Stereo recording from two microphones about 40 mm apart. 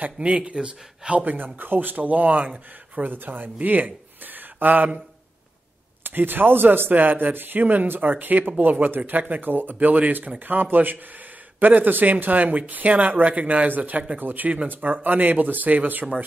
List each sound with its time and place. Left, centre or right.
0.2 s speech: right
1.2 s speech: right
2.2 s speech: right
3.0 s speech: right
6.0 s speech: right
6.9 s speech: right